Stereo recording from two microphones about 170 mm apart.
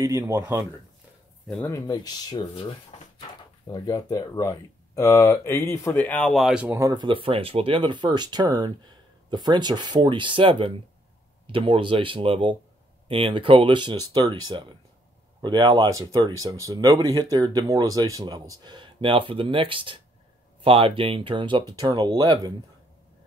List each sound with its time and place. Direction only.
0.0 s speech: 20° right (ahead or behind)
1.6 s speech: 20° left (ahead or behind); by 6.8 s 5° right (ahead or behind)
6.8 s speech: 25° right (ahead or behind)